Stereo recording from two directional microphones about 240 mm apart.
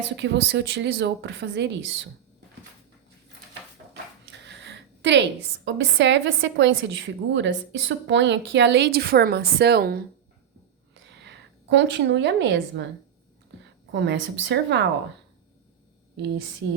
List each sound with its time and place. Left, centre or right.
0.2 s a woman's voice: right
4.3 s a woman's voice: right
11.2 s a woman's voice: right
13.9 s a woman's voice: right